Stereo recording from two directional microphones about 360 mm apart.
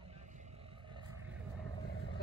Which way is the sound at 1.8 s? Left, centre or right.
Left.